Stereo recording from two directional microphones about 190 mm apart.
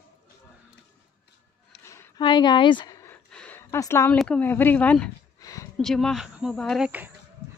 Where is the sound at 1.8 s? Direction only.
15° left (ahead or behind).